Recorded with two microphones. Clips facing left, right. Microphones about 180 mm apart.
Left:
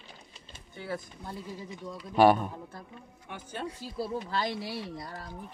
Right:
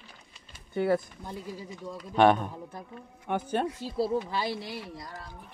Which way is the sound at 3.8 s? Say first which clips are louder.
Right 6 dB; 25° right (ahead or behind).